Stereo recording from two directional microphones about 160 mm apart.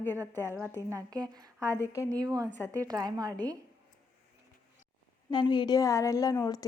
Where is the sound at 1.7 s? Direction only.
15° left (ahead or behind).